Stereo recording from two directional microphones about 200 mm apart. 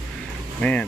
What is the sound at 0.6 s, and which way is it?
Speech, 5° left (ahead or behind).